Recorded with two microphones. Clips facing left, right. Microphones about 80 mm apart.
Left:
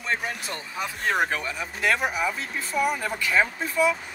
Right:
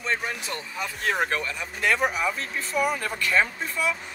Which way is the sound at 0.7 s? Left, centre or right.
Centre.